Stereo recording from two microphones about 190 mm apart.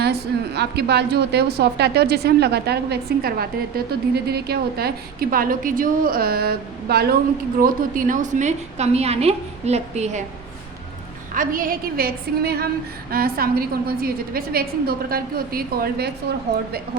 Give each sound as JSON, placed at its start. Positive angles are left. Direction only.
{"t": 0.0, "sound": "a woman's voice", "side_deg": -60}
{"t": 11.3, "sound": "a woman's voice", "side_deg": -45}